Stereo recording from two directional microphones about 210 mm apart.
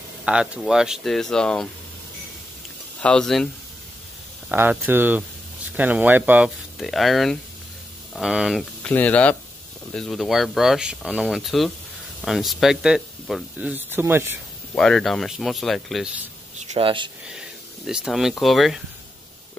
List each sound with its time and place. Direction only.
0.2 s speech: 5° right (ahead or behind)
3.0 s speech: 5° left (ahead or behind)
4.5 s speech: 10° right (ahead or behind)
14.8 s speech: centre (ahead or behind)
16.7 s speech: 25° right (ahead or behind)
17.3 s speech: 5° right (ahead or behind)